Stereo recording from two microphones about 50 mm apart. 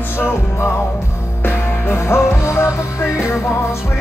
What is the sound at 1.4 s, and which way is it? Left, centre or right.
Music, left.